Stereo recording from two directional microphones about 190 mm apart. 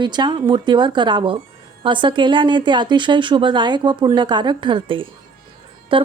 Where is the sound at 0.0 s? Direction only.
25° right (ahead or behind).